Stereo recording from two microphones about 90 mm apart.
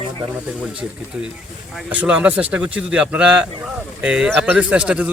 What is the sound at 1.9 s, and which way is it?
Speech, 15° right (ahead or behind).